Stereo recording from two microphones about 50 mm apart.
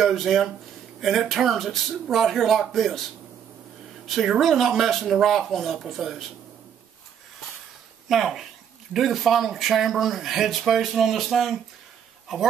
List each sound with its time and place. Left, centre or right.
0.0 s speech: centre
8.1 s speech: centre